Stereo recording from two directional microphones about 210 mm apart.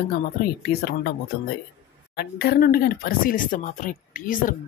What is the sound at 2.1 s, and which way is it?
Speech, 50° left (ahead or behind).